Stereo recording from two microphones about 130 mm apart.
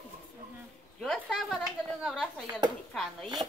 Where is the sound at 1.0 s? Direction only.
5° left (ahead or behind).